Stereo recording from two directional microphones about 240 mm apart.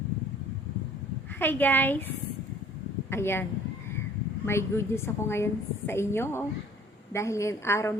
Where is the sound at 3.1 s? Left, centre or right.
Centre.